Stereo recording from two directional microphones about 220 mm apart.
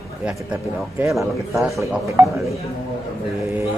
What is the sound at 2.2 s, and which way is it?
Speech, 15° right (ahead or behind).